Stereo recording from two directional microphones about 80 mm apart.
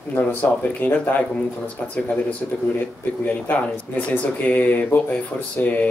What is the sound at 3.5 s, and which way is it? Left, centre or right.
Speech, centre.